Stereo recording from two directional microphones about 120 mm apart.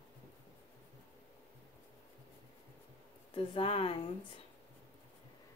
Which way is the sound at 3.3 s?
50° left (ahead or behind).